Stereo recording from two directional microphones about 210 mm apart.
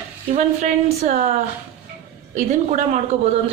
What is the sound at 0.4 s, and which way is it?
Speech, 35° right (ahead or behind).